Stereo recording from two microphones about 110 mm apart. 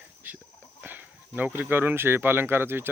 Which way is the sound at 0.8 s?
15° right (ahead or behind).